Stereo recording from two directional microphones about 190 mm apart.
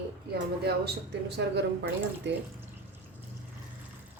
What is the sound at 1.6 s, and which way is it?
Speech, 65° right (ahead or behind).